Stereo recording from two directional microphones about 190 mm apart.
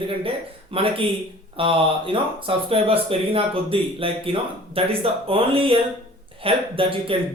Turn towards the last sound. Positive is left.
turn(degrees=-30)  # may be behind; listen again after turning